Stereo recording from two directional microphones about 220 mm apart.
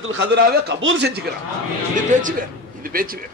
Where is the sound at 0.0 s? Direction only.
55° right (ahead or behind).